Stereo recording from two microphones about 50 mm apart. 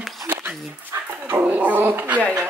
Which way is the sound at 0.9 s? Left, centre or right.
Right.